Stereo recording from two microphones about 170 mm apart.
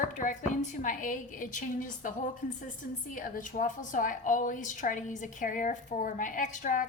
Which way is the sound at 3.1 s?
50° left (ahead or behind).